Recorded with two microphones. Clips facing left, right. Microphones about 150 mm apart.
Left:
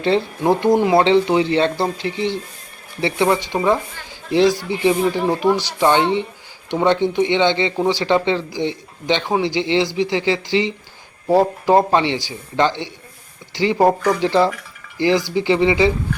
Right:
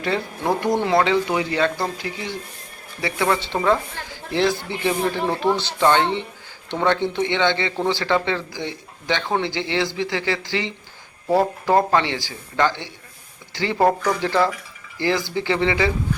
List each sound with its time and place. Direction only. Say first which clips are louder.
0.0 s speech: left 6 dB; 25° left (ahead or behind)